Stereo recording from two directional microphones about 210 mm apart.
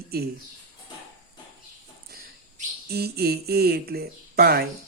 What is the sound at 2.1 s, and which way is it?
Mantra, 50° right (ahead or behind).